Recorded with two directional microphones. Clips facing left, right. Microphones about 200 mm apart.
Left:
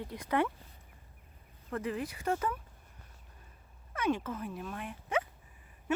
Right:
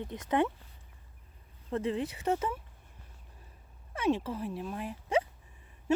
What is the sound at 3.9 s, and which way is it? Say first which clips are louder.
Speech: right 3 dB; 30° right (ahead or behind).